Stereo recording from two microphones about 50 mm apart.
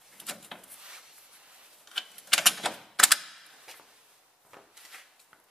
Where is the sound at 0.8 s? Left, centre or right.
Centre.